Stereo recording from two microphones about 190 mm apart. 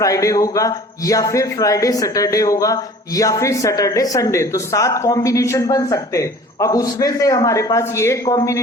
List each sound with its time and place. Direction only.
0.0 s a man's voice: 15° left (ahead or behind)